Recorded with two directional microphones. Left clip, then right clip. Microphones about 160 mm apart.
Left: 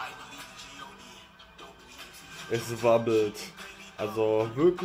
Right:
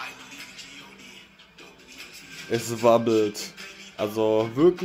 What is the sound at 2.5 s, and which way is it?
Speech, 35° right (ahead or behind).